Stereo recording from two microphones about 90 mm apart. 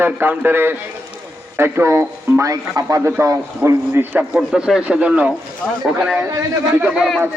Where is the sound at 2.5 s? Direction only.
40° right (ahead or behind); by 4.3 s 20° right (ahead or behind).